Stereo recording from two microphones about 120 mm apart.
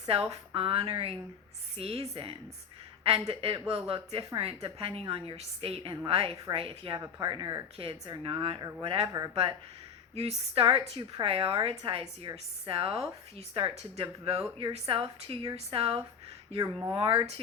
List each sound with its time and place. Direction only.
0.1 s a woman's voice: 55° right (ahead or behind)
6.9 s a woman's voice: 30° right (ahead or behind); by 17.4 s 55° right (ahead or behind)